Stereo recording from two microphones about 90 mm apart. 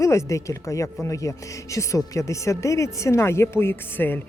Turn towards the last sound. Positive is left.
turn(degrees=25)  # may be behind; listen again after turning